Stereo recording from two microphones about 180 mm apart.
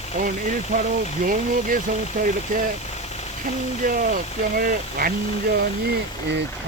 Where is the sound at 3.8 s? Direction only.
50° right (ahead or behind).